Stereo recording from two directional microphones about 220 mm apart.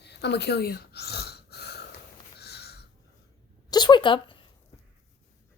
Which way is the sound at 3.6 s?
20° left (ahead or behind).